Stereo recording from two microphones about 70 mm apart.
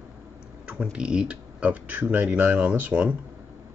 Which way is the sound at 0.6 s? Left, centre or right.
Centre.